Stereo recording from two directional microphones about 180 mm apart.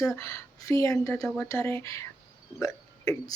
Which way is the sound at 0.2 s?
15° left (ahead or behind).